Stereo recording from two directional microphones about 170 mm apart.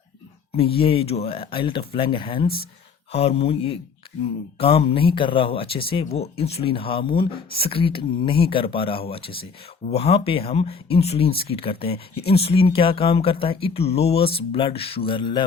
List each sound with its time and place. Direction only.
0.5 s speech: 35° left (ahead or behind)